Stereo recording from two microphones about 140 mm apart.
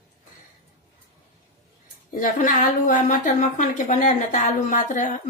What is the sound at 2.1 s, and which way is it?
A woman's voice, 75° left (ahead or behind).